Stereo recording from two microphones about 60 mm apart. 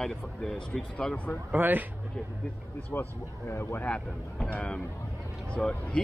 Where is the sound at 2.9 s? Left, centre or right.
Left.